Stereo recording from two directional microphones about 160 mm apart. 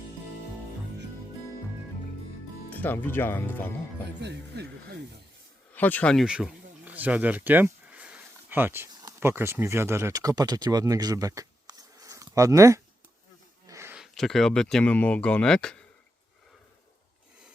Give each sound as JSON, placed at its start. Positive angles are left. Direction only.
{"t": 2.6, "sound": "speech", "side_deg": 10}
{"t": 4.2, "sound": "speech", "side_deg": -90}
{"t": 5.7, "sound": "speech", "side_deg": 10}
{"t": 6.2, "sound": "speech", "side_deg": -5}
{"t": 13.7, "sound": "a sound", "side_deg": -20}
{"t": 13.9, "sound": "speech", "side_deg": 0}